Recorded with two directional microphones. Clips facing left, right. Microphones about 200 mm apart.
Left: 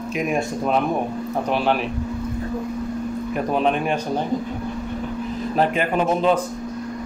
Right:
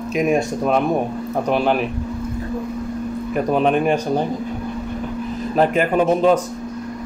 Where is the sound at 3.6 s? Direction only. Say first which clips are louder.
Right 4 dB; 45° right (ahead or behind).